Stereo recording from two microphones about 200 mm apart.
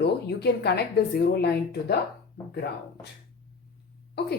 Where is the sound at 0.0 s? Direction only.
55° left (ahead or behind).